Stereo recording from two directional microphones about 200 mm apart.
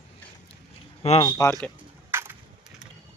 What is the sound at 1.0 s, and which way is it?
Speech, 30° left (ahead or behind).